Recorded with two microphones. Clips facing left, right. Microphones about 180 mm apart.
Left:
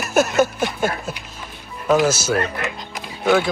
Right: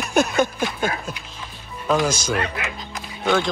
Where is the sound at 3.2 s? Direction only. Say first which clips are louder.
Left 3 dB; 5° left (ahead or behind).